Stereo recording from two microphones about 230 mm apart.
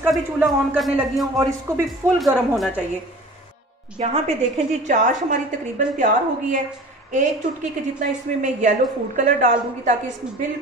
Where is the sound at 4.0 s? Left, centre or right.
Right.